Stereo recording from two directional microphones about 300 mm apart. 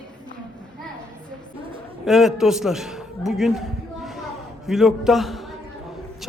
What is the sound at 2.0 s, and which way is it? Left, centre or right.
A man's voice, centre.